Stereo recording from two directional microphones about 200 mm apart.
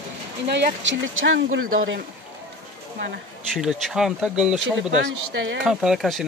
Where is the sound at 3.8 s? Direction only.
Centre (ahead or behind).